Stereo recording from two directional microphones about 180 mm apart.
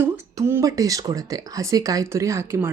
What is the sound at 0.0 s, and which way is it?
Speech, 15° right (ahead or behind).